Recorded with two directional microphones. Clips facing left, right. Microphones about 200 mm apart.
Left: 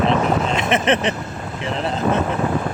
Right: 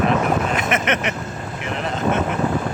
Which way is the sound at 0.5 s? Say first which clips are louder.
Left 3 dB; 30° left (ahead or behind).